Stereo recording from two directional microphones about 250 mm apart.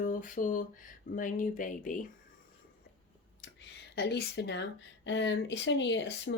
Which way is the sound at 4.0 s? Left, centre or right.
Left.